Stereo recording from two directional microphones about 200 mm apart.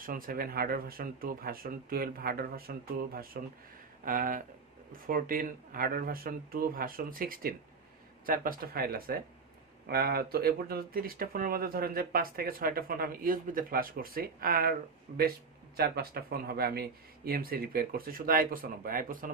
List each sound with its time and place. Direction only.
0.0 s speech: 45° right (ahead or behind)